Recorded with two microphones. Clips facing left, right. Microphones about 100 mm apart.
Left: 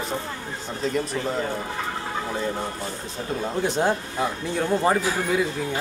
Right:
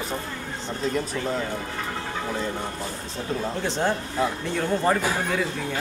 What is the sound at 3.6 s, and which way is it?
Speech, 15° left (ahead or behind).